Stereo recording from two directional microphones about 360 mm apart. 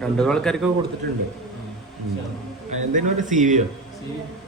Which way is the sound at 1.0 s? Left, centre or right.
Right.